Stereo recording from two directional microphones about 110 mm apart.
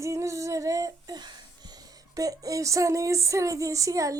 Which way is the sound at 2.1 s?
30° right (ahead or behind).